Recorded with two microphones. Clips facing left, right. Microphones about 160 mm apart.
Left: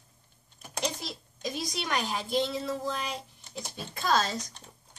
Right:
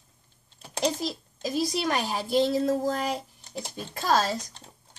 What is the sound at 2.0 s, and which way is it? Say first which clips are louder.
Speech: right 3 dB; 40° right (ahead or behind).